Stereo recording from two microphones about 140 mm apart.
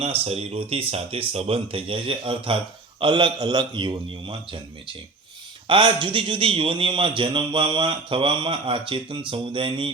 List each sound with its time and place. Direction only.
0.0 s a man's voice: 45° right (ahead or behind)